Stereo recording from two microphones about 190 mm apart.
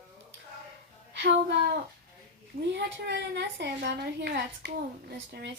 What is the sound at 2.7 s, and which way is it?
A woman's voice, 65° right (ahead or behind).